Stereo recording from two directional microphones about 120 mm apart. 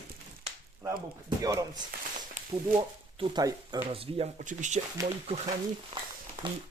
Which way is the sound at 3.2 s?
50° right (ahead or behind).